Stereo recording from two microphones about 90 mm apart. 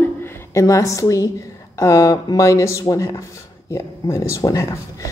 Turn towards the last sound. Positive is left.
turn(degrees=35)  # may be behind; listen again after turning